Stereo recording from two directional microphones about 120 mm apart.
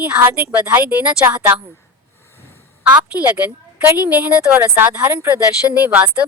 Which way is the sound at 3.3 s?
15° right (ahead or behind).